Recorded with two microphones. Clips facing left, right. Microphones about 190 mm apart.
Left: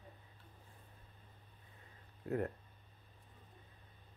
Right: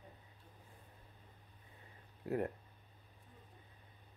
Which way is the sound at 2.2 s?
15° right (ahead or behind).